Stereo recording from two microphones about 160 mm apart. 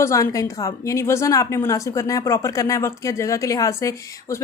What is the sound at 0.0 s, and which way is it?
A woman's voice, 20° left (ahead or behind).